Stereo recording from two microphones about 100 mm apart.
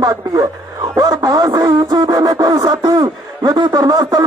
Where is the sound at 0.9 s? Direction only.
40° right (ahead or behind).